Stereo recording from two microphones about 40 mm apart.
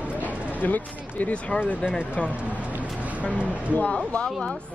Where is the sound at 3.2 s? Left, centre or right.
Left.